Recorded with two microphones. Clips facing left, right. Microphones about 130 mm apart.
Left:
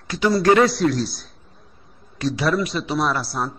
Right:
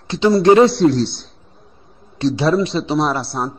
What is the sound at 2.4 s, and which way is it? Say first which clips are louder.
Speech: right 4 dB; 25° right (ahead or behind).